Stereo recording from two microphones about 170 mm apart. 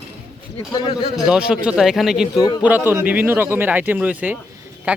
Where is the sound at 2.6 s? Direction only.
10° right (ahead or behind).